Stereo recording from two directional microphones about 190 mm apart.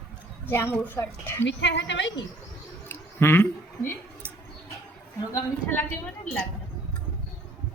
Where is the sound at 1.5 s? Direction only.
70° left (ahead or behind).